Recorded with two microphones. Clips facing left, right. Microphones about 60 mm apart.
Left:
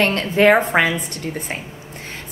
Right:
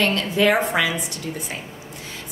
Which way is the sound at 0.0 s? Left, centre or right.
Left.